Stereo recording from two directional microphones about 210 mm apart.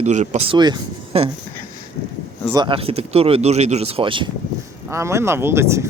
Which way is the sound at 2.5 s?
20° right (ahead or behind).